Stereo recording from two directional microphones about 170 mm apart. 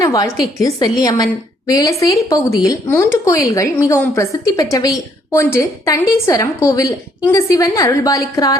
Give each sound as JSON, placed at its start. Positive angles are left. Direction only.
{"t": 0.0, "sound": "a woman's voice", "side_deg": 20}